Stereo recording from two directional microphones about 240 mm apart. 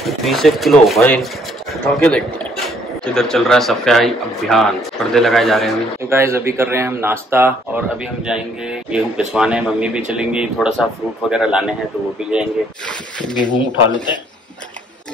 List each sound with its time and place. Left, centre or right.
0.0 s speech: centre
6.0 s speech: centre
9.3 s speech: centre
13.4 s speech: centre